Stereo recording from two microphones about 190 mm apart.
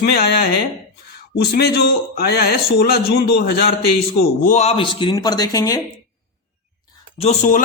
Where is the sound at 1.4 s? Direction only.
55° left (ahead or behind).